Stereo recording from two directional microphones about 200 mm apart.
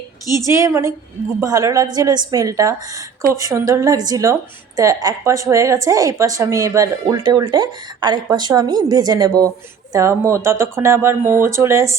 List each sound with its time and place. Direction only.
0.3 s speech: 15° right (ahead or behind)